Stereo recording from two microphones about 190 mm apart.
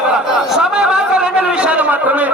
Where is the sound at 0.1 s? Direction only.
5° right (ahead or behind).